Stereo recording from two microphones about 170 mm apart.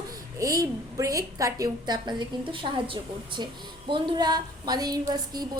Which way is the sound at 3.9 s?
25° right (ahead or behind).